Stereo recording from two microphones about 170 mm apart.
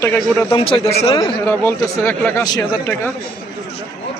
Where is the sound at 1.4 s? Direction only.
15° left (ahead or behind).